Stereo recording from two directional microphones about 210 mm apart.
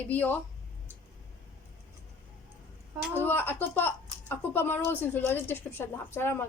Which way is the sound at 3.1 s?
10° left (ahead or behind).